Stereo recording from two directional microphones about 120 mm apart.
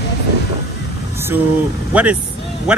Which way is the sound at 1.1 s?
20° right (ahead or behind).